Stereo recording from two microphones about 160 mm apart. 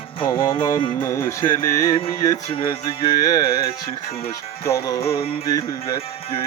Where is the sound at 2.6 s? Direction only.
25° left (ahead or behind).